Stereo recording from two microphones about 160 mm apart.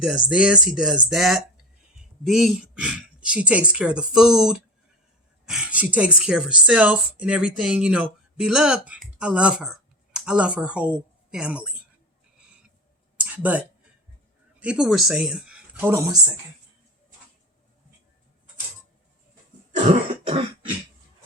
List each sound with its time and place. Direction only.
0.3 s speech: 5° right (ahead or behind)
13.1 s a sound: 10° right (ahead or behind)
14.6 s speech: 5° right (ahead or behind)
19.7 s throat clearing: 40° right (ahead or behind)